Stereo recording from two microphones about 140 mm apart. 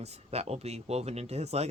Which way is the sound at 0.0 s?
50° right (ahead or behind).